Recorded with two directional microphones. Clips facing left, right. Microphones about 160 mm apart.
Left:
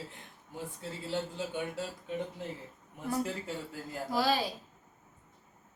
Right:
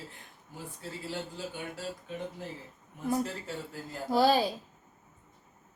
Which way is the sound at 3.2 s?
10° left (ahead or behind).